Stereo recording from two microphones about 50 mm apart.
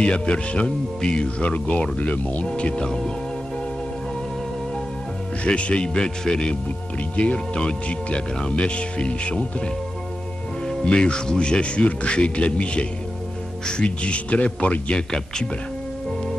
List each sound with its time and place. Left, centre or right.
0.0 s speech: centre
5.4 s speech: left
10.9 s speech: centre